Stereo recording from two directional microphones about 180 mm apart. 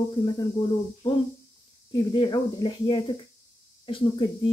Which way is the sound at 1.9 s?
25° left (ahead or behind).